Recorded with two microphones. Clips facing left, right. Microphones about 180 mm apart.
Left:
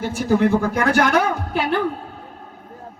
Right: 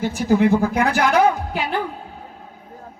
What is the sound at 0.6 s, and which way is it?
A man's voice, 55° left (ahead or behind).